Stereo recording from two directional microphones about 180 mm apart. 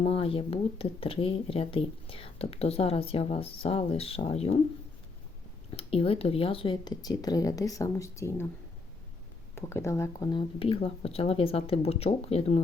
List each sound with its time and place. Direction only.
0.0 s speech: 35° left (ahead or behind)
5.7 s speech: 30° left (ahead or behind); by 8.4 s 15° left (ahead or behind)
9.6 s speech: 15° left (ahead or behind); by 12.6 s 35° left (ahead or behind)